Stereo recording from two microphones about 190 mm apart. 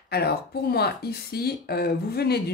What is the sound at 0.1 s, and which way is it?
Speech, 55° left (ahead or behind).